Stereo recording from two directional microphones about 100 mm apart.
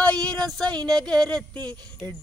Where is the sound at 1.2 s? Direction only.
10° left (ahead or behind).